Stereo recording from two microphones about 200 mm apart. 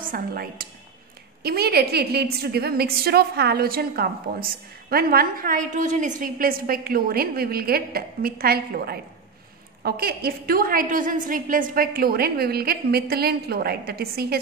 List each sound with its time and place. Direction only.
0.0 s a woman's voice: 45° right (ahead or behind)